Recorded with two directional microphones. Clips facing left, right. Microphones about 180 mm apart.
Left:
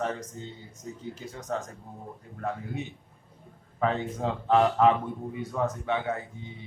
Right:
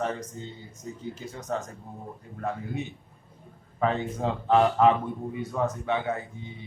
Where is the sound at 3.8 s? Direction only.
20° right (ahead or behind).